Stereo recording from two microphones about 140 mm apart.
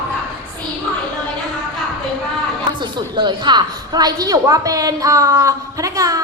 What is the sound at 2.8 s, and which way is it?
A woman's voice, 30° right (ahead or behind).